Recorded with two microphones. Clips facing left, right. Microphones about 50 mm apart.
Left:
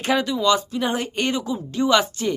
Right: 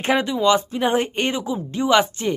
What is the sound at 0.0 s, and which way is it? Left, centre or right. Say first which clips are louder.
Speech: right 2 dB; right.